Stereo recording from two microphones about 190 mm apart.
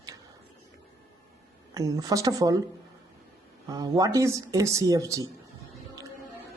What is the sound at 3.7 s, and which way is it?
Speech, 20° right (ahead or behind).